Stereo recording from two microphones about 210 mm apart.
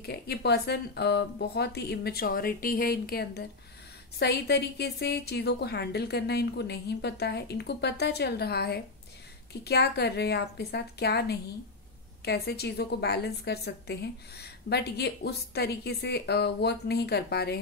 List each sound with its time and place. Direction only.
0.0 s a woman's voice: 50° left (ahead or behind)